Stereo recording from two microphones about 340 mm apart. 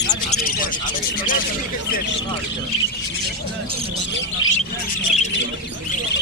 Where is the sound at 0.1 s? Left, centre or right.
Centre.